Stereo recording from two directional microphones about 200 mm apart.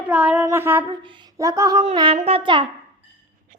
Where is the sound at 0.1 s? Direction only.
5° right (ahead or behind).